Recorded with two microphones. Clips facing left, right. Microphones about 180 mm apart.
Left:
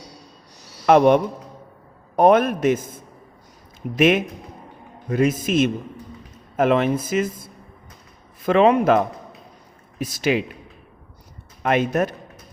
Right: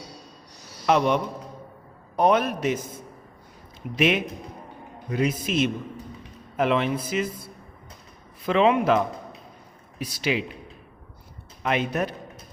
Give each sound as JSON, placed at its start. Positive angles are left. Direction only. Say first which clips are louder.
{"t": 0.9, "sound": "speech", "louder": "left 7 dB", "side_deg": 55}
{"t": 3.9, "sound": "speech", "louder": "left 5 dB", "side_deg": 50}
{"t": 11.6, "sound": "speech", "louder": "left 5 dB", "side_deg": 50}